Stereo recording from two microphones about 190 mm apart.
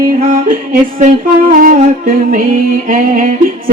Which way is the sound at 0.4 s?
45° right (ahead or behind).